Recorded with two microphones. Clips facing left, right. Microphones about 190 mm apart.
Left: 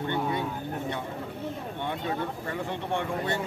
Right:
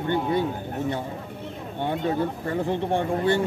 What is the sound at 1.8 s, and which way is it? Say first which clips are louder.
Speech: right 8 dB; 35° right (ahead or behind).